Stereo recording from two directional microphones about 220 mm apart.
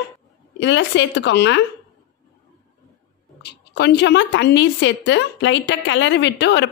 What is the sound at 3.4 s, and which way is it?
A woman's voice, 50° left (ahead or behind).